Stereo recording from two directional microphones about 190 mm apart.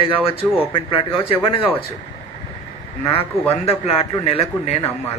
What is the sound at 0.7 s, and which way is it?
Speech, 30° left (ahead or behind).